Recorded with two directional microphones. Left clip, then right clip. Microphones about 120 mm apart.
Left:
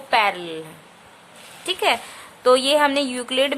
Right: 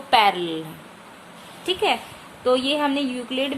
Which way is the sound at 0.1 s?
25° left (ahead or behind).